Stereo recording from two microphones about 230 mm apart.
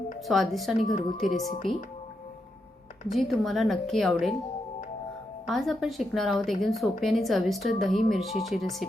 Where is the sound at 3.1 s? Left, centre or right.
Centre.